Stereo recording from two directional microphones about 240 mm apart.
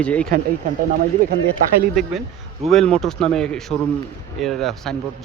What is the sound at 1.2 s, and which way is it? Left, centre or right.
Speech, right.